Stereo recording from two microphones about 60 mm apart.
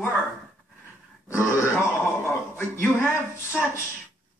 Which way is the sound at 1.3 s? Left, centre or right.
Left.